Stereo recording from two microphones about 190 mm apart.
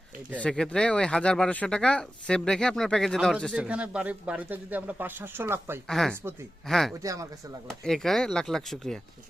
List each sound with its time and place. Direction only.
0.3 s speech: 5° left (ahead or behind); by 5.8 s 10° right (ahead or behind)
5.9 s speech: centre (ahead or behind)
7.0 s speech: 15° right (ahead or behind)
7.7 s speech: centre (ahead or behind)